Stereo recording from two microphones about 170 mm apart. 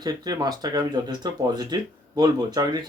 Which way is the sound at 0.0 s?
25° right (ahead or behind).